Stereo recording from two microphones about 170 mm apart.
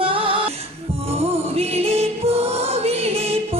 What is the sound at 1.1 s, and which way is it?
Music, 35° right (ahead or behind).